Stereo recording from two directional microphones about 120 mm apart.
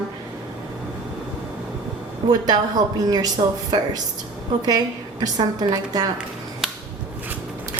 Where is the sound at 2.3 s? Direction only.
30° right (ahead or behind).